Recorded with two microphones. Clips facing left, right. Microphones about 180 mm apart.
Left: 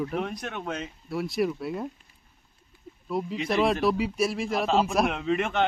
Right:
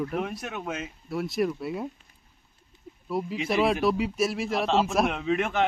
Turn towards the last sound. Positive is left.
turn(degrees=0)  # may be behind; listen again after turning